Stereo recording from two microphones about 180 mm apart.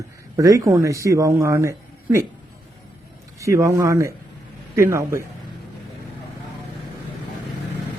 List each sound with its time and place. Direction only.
0.3 s speech: 20° right (ahead or behind)
3.4 s speech: 15° right (ahead or behind)